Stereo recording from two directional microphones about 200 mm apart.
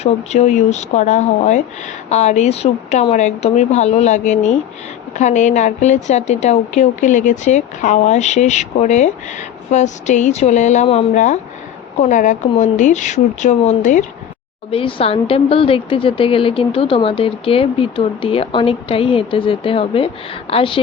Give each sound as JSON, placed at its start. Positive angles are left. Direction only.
{"t": 0.0, "sound": "a woman's voice", "side_deg": 35}
{"t": 14.7, "sound": "speech", "side_deg": 25}